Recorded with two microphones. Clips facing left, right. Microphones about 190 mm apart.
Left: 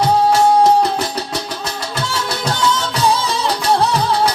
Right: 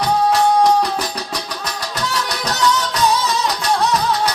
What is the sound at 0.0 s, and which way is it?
Music, 25° left (ahead or behind).